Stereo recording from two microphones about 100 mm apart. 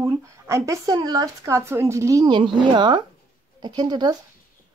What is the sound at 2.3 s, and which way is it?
Speech, 50° right (ahead or behind).